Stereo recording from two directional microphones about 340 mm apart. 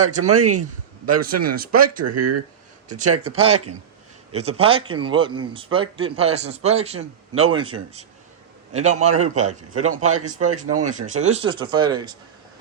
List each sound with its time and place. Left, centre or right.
0.2 s speech: right
1.2 s a man's voice: right
2.0 s speech: right
4.3 s a man's voice: centre